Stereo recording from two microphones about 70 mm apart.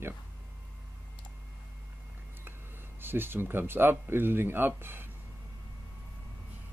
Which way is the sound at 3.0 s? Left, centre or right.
Right.